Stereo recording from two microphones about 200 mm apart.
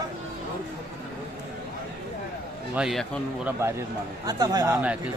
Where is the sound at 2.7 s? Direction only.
Centre (ahead or behind).